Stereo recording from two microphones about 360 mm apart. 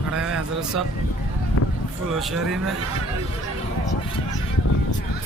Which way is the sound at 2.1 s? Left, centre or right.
Centre.